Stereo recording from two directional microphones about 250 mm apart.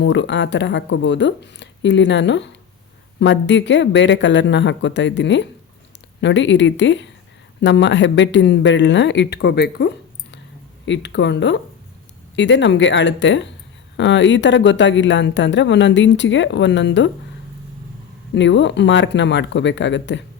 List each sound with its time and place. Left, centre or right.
0.0 s speech: left
18.3 s speech: left